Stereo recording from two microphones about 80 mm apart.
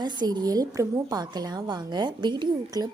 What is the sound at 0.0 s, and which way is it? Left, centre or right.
A woman's voice, right.